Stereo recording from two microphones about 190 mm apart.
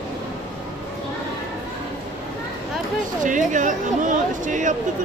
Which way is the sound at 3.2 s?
40° right (ahead or behind).